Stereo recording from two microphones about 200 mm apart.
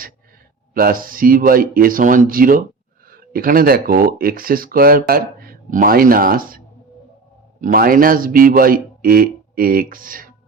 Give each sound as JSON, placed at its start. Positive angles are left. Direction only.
{"t": 0.7, "sound": "speech", "side_deg": -45}
{"t": 7.6, "sound": "speech", "side_deg": -45}